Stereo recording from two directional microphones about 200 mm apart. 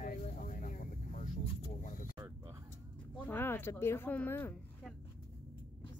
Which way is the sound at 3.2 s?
10° left (ahead or behind).